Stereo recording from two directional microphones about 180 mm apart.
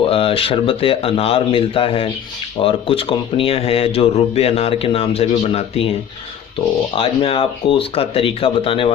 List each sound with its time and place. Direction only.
0.1 s speech: 30° left (ahead or behind)
6.9 s speech: 30° left (ahead or behind)